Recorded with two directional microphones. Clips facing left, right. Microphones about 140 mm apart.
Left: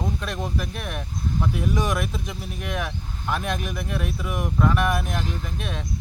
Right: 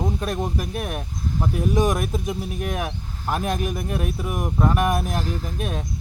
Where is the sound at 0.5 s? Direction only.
45° right (ahead or behind).